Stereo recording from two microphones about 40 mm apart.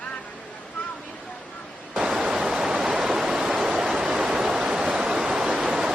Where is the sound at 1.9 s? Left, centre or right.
Centre.